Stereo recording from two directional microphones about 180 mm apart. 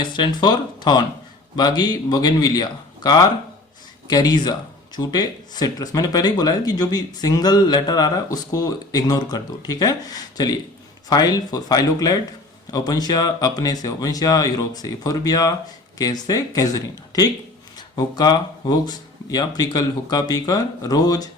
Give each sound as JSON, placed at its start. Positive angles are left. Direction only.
{"t": 0.0, "sound": "speech", "side_deg": 25}